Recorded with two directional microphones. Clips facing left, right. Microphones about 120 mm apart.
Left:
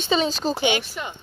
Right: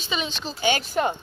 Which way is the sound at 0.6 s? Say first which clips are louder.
Right 2 dB; 45° right (ahead or behind).